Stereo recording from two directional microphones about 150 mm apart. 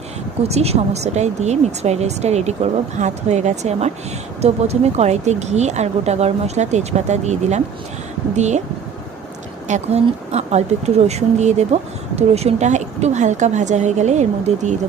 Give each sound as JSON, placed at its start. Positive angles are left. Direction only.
{"t": 0.4, "sound": "speech", "side_deg": -45}
{"t": 9.6, "sound": "speech", "side_deg": -50}